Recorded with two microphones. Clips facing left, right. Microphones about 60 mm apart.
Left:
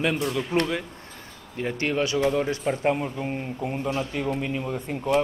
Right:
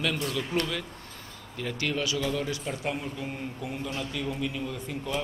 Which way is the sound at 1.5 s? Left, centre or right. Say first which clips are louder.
Left 5 dB; left.